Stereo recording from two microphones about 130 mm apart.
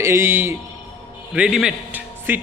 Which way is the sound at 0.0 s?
20° right (ahead or behind).